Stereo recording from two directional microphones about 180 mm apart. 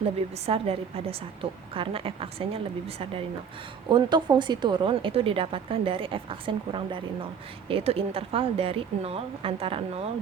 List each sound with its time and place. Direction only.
0.4 s a woman's voice: 35° right (ahead or behind)